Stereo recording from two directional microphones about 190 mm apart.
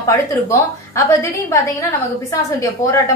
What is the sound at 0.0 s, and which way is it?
A woman's voice, 15° left (ahead or behind).